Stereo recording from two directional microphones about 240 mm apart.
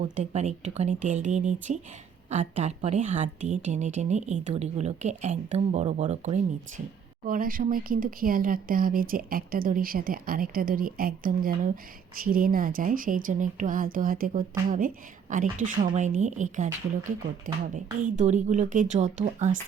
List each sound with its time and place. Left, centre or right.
0.0 s a woman's voice: right